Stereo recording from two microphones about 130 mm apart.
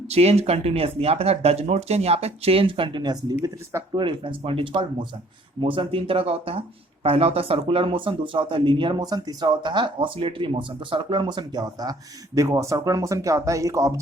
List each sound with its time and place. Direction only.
0.1 s speech: 55° right (ahead or behind); by 3.3 s 35° right (ahead or behind)
3.4 s speech: 20° right (ahead or behind)
3.9 s speech: 40° right (ahead or behind); by 14.0 s 25° right (ahead or behind)